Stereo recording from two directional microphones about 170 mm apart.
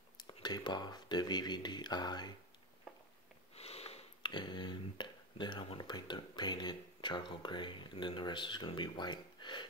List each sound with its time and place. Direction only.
0.2 s speech: 25° left (ahead or behind)
3.5 s speech: 35° left (ahead or behind)